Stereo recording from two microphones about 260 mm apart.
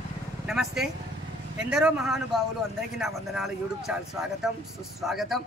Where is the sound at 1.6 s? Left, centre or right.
Centre.